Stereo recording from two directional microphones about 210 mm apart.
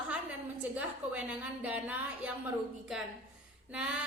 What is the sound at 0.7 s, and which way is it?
A woman's voice, 5° right (ahead or behind).